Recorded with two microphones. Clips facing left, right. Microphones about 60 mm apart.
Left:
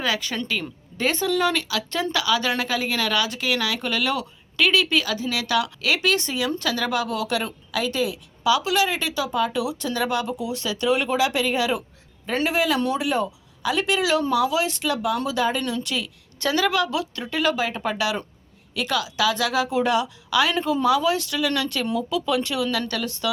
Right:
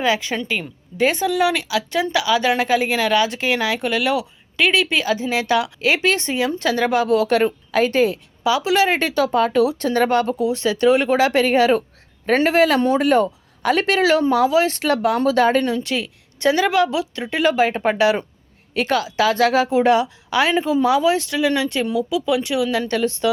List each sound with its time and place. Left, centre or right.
0.0 s a woman's voice: right
8.4 s speech: right
8.9 s speech: right
11.3 s speech: right
15.6 s a woman's voice: right
20.6 s speech: centre
22.9 s speech: right